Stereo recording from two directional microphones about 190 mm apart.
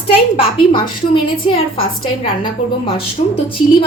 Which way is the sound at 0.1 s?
25° left (ahead or behind).